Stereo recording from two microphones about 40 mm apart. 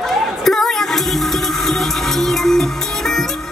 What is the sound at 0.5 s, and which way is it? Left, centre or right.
Music, centre.